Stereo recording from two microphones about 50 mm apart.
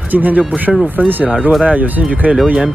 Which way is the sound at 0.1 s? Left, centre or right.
Right.